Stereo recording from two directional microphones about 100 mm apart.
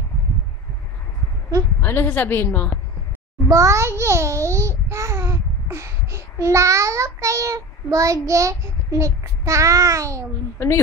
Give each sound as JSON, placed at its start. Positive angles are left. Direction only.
{"t": 1.8, "sound": "a woman's voice", "side_deg": 20}
{"t": 3.4, "sound": "a child's voice", "side_deg": -35}